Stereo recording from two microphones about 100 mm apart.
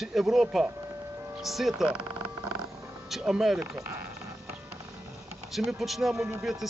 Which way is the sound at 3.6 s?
30° right (ahead or behind).